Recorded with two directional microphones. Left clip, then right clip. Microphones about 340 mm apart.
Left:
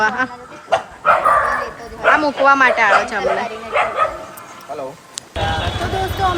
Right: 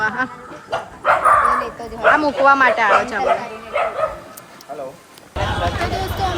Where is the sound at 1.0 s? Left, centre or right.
Right.